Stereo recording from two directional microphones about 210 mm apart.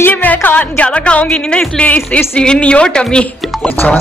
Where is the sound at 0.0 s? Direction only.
10° left (ahead or behind).